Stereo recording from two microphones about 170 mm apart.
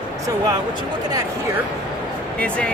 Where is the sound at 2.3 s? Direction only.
5° left (ahead or behind).